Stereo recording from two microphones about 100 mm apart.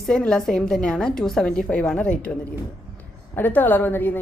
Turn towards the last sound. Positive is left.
turn(degrees=20)  # may be behind; listen again after turning